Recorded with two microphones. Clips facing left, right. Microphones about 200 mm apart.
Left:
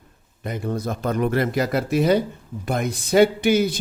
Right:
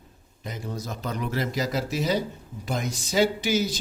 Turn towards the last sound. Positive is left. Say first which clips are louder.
# left 6 dB
turn(degrees=60)  # may be behind; listen again after turning